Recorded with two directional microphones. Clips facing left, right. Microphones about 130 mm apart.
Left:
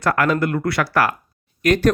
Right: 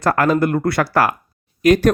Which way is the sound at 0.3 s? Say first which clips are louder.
Right 3 dB; 25° right (ahead or behind).